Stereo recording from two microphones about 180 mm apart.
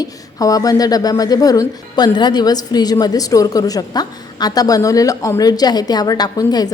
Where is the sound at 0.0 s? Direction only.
20° left (ahead or behind).